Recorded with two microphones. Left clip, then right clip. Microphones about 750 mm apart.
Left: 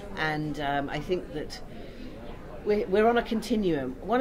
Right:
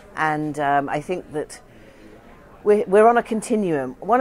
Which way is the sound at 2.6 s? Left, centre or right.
Right.